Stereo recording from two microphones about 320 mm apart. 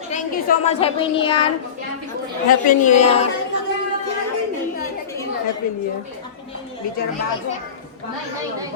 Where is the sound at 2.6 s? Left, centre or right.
Left.